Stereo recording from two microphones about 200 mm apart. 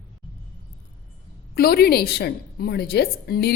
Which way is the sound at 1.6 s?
50° left (ahead or behind).